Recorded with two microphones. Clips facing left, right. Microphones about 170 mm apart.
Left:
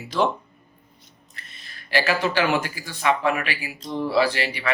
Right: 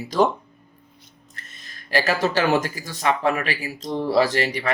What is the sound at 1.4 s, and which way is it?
Speech, 45° right (ahead or behind).